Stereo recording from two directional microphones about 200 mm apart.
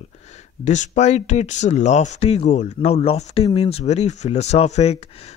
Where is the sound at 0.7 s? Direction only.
35° left (ahead or behind).